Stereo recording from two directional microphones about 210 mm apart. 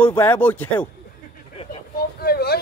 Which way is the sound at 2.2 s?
50° left (ahead or behind).